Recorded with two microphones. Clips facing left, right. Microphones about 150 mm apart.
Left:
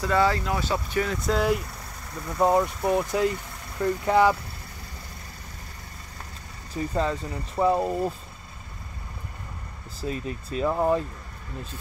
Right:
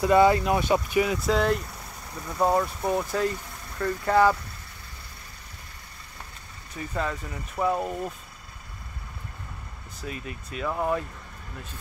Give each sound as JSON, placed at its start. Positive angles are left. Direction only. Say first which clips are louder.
{"t": 0.0, "sound": "speech", "louder": "right 4 dB", "side_deg": -20}
{"t": 6.7, "sound": "speech", "louder": "left 4 dB", "side_deg": 30}
{"t": 10.0, "sound": "speech", "louder": "left 6 dB", "side_deg": 30}